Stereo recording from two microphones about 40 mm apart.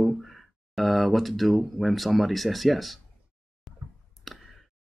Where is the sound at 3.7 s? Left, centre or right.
Centre.